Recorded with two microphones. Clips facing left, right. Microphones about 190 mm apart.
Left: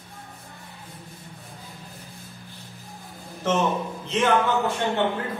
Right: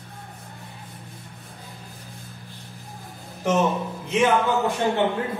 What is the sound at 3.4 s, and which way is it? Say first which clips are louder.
Speech: right 2 dB; 10° right (ahead or behind).